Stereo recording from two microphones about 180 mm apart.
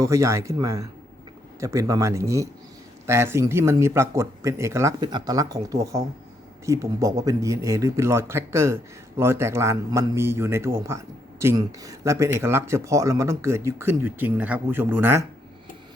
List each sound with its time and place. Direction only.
0.0 s speech: 15° right (ahead or behind)